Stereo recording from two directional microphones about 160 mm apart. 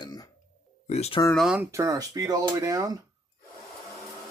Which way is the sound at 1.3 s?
Centre (ahead or behind).